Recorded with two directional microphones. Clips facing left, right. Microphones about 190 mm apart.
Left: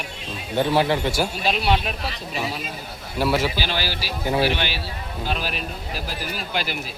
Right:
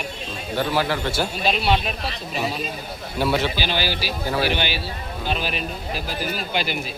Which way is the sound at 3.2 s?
5° left (ahead or behind).